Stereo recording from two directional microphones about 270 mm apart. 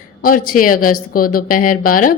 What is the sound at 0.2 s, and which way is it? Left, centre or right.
A woman's voice, left.